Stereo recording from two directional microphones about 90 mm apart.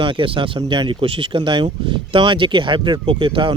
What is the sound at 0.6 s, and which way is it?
Speech, 60° right (ahead or behind).